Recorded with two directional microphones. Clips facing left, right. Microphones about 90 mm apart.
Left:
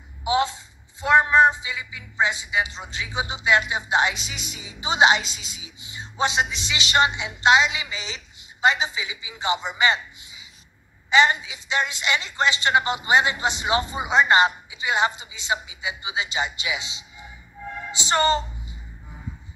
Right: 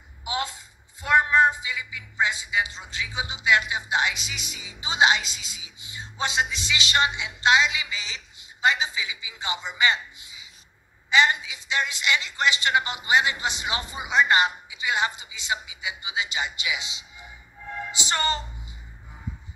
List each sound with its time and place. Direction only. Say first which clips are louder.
0.2 s a sound: left 8 dB; 25° left (ahead or behind)
1.0 s a woman's voice: left 3 dB; 25° left (ahead or behind)
17.9 s music: left 7 dB; 30° left (ahead or behind)